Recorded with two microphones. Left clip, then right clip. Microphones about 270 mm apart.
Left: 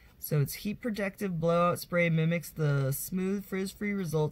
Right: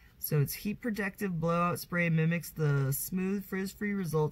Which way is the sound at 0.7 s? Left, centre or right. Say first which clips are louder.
Left 2 dB; centre.